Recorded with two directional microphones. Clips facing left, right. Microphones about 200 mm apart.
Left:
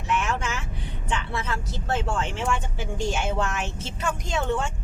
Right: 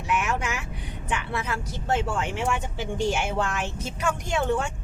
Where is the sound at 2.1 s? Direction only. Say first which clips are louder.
Even; 15° right (ahead or behind).